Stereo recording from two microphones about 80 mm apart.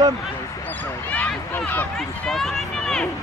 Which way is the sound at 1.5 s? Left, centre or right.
Left.